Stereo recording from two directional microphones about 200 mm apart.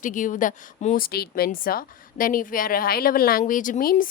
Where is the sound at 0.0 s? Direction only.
40° left (ahead or behind).